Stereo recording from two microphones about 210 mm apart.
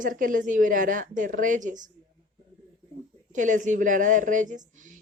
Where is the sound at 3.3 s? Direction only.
35° right (ahead or behind).